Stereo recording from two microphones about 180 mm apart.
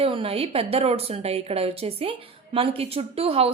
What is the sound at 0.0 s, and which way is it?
A woman's voice, 30° right (ahead or behind).